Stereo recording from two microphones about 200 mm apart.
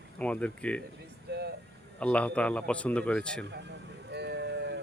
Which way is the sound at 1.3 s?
55° right (ahead or behind).